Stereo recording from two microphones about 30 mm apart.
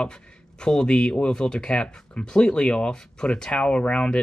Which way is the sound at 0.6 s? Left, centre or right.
Left.